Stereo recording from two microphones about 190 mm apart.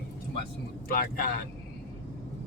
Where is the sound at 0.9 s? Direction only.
50° left (ahead or behind).